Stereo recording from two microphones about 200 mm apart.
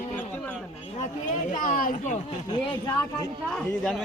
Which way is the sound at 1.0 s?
35° left (ahead or behind).